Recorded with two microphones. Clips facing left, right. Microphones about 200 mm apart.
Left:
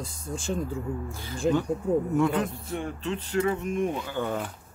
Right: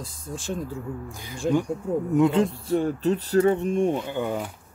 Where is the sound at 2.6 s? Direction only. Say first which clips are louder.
Right 9 dB; 35° right (ahead or behind); by 4.5 s 10° right (ahead or behind).